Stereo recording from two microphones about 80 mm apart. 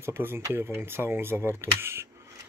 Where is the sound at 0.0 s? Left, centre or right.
Right.